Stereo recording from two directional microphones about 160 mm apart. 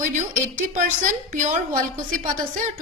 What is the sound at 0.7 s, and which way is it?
A woman's voice, 50° right (ahead or behind).